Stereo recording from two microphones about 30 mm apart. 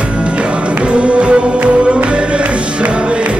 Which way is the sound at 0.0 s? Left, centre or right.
Right.